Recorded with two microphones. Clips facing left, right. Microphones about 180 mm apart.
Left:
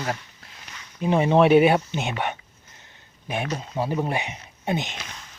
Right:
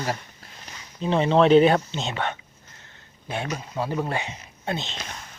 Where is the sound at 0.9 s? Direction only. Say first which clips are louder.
Left 1 dB; 15° left (ahead or behind).